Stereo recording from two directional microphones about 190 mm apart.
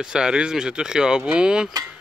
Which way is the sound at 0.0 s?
5° right (ahead or behind).